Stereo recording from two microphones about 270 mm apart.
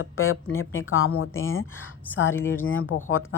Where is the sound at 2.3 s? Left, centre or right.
Centre.